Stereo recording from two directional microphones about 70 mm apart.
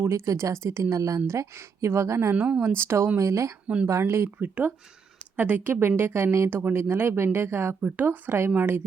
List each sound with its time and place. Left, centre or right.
0.0 s speech: right
2.3 s speech: centre
2.7 s speech: right
3.2 s speech: right
4.4 s speech: right
7.8 s speech: right